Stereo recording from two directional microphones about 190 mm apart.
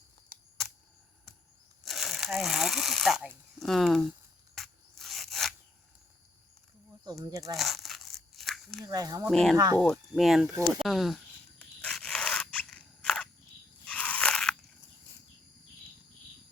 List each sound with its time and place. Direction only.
0.3 s camera: 50° right (ahead or behind)
1.8 s a sound: centre (ahead or behind)
7.0 s speech: 20° right (ahead or behind)
7.5 s crumpling: centre (ahead or behind)
8.8 s speech: 20° right (ahead or behind)
9.3 s speech: centre (ahead or behind)
11.6 s a sound: 5° left (ahead or behind)
13.8 s biting: 10° left (ahead or behind)